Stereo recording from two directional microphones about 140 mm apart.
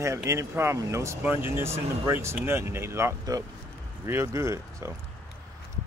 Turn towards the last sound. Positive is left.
turn(degrees=-20)  # may be behind; listen again after turning